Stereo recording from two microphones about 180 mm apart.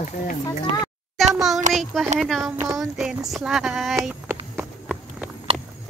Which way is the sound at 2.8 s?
Centre (ahead or behind).